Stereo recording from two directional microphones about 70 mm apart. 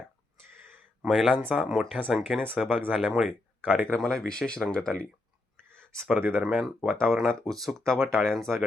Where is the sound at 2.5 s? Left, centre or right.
Centre.